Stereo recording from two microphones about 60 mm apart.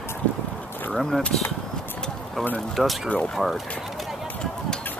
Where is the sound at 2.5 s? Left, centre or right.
Centre.